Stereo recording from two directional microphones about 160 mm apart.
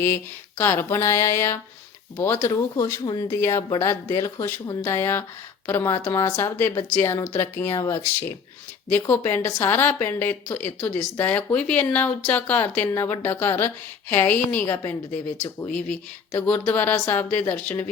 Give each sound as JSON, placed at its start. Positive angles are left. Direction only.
{"t": 0.6, "sound": "a woman's voice", "side_deg": 15}